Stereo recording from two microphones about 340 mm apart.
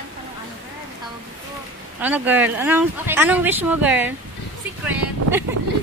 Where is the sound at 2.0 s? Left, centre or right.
Centre.